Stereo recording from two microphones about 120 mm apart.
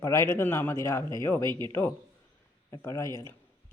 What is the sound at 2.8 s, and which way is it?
Speech, 25° left (ahead or behind).